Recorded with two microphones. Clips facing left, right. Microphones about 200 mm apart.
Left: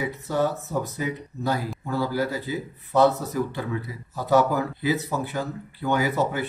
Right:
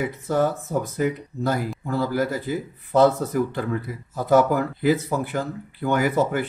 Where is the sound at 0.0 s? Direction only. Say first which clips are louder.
Right 3 dB; 50° right (ahead or behind).